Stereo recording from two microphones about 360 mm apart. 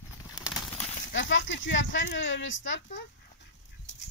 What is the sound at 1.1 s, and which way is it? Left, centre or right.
Speech, left.